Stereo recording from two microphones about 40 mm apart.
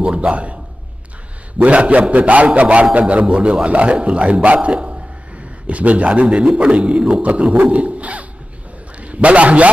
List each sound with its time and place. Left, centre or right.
0.0 s speech: right
1.6 s a man's voice: right
7.7 s dog: right
9.0 s a man's voice: right